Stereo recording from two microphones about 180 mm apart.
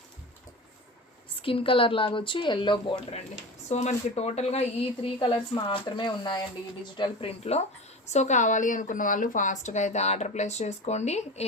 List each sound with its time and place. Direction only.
1.4 s speech: 30° left (ahead or behind)
3.7 s a woman's voice: 40° left (ahead or behind)